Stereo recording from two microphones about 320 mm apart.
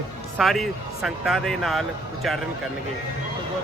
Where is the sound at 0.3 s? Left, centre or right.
Centre.